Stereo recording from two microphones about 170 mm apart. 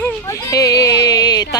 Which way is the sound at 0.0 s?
20° left (ahead or behind).